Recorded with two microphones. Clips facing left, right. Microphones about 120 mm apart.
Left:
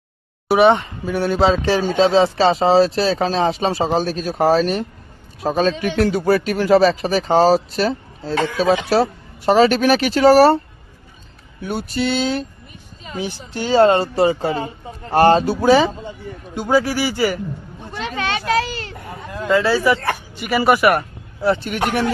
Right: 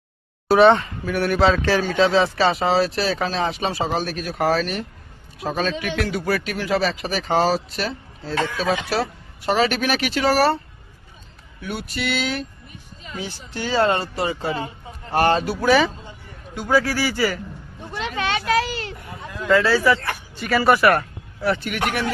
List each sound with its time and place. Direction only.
0.4 s speech: 15° left (ahead or behind); by 8.4 s 35° left (ahead or behind)
9.5 s speech: 35° left (ahead or behind)
11.6 s speech: 35° left (ahead or behind)
13.5 s speech: 25° left (ahead or behind)
18.2 s a sound: 5° right (ahead or behind)
19.1 s a sound: 40° left (ahead or behind)
19.5 s speech: 20° left (ahead or behind)
21.4 s speech: 30° left (ahead or behind)